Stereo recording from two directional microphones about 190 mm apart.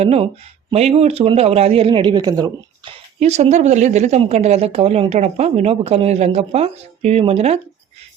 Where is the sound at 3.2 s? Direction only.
35° right (ahead or behind).